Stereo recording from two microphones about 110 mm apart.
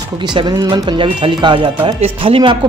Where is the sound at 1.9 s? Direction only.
60° right (ahead or behind).